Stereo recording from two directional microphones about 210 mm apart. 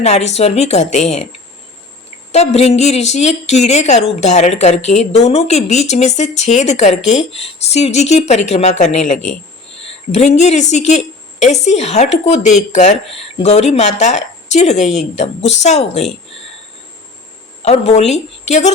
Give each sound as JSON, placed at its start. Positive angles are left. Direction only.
{"t": 0.0, "sound": "a woman's voice", "side_deg": 30}
{"t": 2.3, "sound": "a woman's voice", "side_deg": 30}
{"t": 17.6, "sound": "a woman's voice", "side_deg": 30}